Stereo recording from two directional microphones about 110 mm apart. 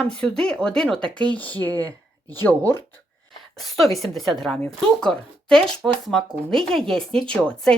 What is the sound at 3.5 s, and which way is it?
Speech, centre (ahead or behind).